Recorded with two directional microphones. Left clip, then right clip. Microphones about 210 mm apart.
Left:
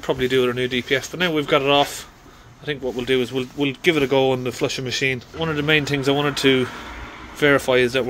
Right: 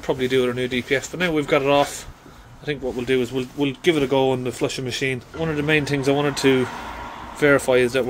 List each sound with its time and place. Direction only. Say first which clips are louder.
0.0 s speech: left 1 dB; centre (ahead or behind)